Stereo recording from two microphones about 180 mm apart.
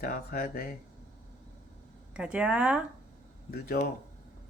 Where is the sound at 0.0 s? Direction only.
55° left (ahead or behind).